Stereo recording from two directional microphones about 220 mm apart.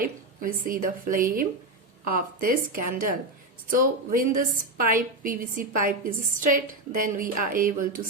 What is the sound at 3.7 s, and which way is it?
A woman's voice, 40° right (ahead or behind).